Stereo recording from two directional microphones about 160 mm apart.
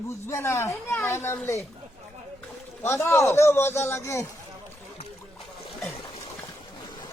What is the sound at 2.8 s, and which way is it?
Speech, 15° left (ahead or behind).